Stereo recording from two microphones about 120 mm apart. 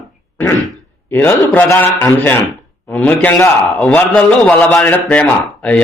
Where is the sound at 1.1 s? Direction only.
15° left (ahead or behind).